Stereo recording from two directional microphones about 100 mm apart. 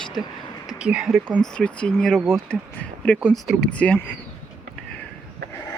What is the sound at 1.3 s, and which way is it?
Speech, 10° left (ahead or behind).